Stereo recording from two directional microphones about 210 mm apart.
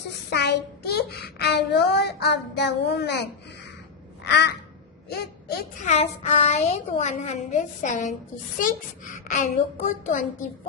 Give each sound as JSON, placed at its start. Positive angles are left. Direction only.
{"t": 0.3, "sound": "child singing", "side_deg": 50}
{"t": 4.3, "sound": "child singing", "side_deg": 55}
{"t": 5.0, "sound": "speech", "side_deg": 50}
{"t": 5.8, "sound": "a woman's voice", "side_deg": 30}